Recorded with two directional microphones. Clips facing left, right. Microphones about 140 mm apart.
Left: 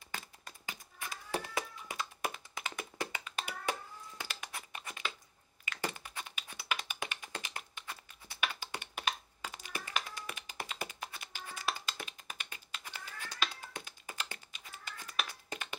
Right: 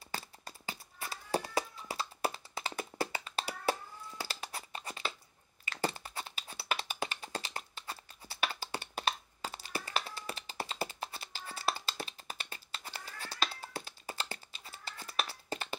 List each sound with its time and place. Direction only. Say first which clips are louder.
0.1 s cat: right 3 dB; 35° right (ahead or behind)
4.2 s a sound: right 3 dB; 30° right (ahead or behind)
5.7 s computer keyboard: right 4 dB; 35° right (ahead or behind)